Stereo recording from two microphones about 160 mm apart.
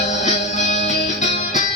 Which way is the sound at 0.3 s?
45° left (ahead or behind).